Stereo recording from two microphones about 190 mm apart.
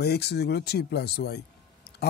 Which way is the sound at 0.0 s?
60° left (ahead or behind).